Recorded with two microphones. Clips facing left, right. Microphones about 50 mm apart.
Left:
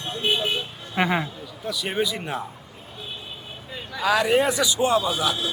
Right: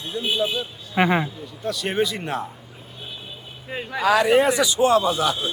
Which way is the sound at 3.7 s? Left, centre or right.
Right.